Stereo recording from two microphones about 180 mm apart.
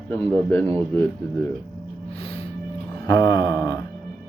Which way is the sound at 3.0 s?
20° left (ahead or behind).